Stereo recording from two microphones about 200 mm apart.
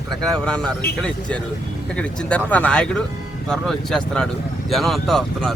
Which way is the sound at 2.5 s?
5° left (ahead or behind).